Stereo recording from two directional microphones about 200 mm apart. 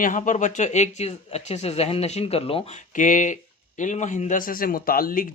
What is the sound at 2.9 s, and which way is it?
A man's voice, 40° left (ahead or behind).